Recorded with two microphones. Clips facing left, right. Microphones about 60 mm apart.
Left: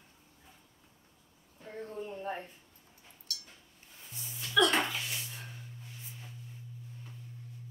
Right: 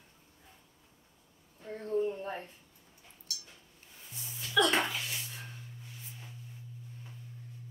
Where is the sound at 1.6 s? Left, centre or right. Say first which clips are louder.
Right 1 dB; centre.